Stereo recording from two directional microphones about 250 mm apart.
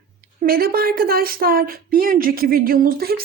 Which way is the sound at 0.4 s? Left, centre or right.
Right.